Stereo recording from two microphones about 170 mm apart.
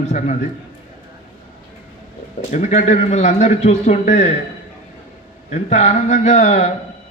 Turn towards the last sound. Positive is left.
turn(degrees=40)  # may be behind; listen again after turning